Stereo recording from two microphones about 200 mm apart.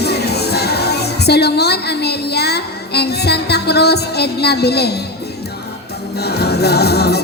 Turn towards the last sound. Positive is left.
turn(degrees=55)  # may be behind; listen again after turning